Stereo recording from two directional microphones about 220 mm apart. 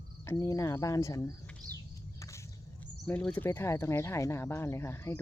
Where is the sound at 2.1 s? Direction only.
15° left (ahead or behind).